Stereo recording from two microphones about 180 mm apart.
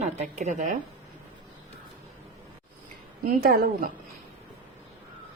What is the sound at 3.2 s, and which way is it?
Speech, 55° right (ahead or behind).